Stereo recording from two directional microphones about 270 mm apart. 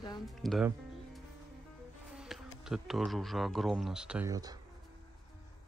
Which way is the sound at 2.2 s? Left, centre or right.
Centre.